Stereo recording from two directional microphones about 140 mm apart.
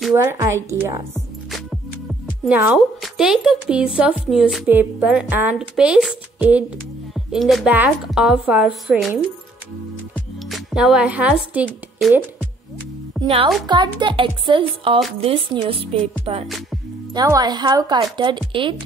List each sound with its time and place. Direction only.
0.1 s a woman's voice: 15° right (ahead or behind)
2.4 s speech: 10° right (ahead or behind)
10.5 s speech: 5° right (ahead or behind)
13.2 s music: 5° left (ahead or behind)
13.7 s a woman's voice: 35° right (ahead or behind)
17.1 s a woman's voice: 30° right (ahead or behind)